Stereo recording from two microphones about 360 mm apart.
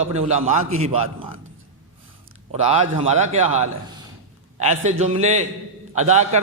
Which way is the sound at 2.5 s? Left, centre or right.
Centre.